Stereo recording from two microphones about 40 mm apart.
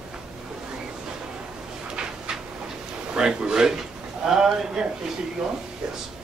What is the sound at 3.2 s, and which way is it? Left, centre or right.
A man's voice, centre.